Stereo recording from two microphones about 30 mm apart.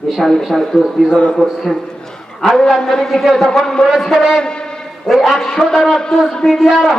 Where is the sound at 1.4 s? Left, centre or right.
Left.